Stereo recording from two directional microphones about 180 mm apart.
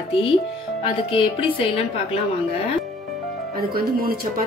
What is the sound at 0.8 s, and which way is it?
A woman's voice, 30° left (ahead or behind).